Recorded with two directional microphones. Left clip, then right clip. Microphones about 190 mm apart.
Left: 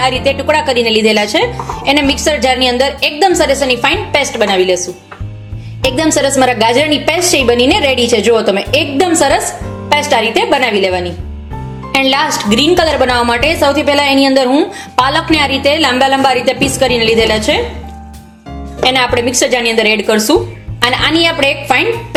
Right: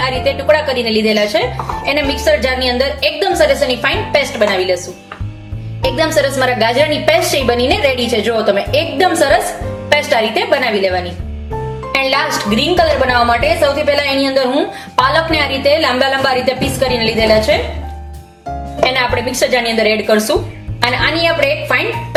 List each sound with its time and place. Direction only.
0.0 s speech: 40° left (ahead or behind)
5.8 s a woman's voice: 40° left (ahead or behind)
18.9 s a woman's voice: 40° left (ahead or behind)